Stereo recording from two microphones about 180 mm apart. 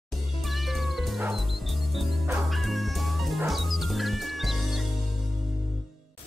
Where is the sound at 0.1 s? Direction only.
Centre (ahead or behind).